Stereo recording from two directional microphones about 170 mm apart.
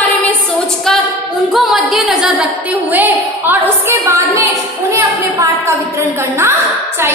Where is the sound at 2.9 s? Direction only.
10° right (ahead or behind).